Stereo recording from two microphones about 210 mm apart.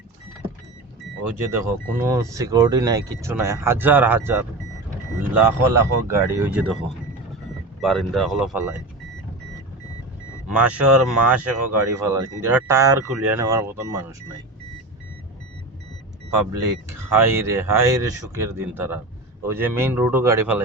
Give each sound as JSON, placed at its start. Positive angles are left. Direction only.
{"t": 1.5, "sound": "speech", "side_deg": -15}
{"t": 10.5, "sound": "speech", "side_deg": -5}
{"t": 17.1, "sound": "speech", "side_deg": -10}